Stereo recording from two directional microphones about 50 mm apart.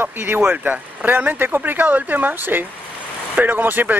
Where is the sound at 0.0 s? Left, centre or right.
Right.